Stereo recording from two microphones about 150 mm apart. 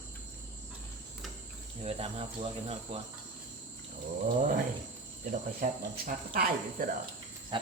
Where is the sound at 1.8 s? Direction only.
40° right (ahead or behind).